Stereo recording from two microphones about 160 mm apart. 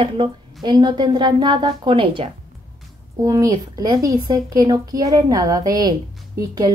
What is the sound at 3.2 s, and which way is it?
Speech, 20° right (ahead or behind).